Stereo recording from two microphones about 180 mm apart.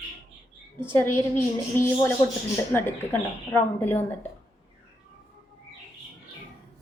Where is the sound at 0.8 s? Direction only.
10° left (ahead or behind).